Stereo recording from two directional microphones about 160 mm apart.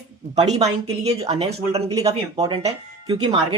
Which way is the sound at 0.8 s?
40° right (ahead or behind).